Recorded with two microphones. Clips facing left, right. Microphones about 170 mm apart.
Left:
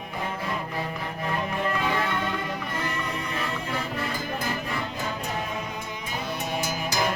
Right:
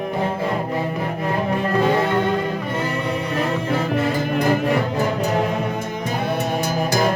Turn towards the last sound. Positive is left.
turn(degrees=-70)  # may be behind; listen again after turning